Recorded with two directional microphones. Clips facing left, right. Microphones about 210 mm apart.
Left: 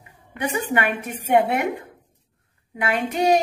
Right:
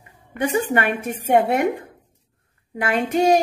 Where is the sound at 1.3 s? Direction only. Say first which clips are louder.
Right 2 dB; 45° right (ahead or behind).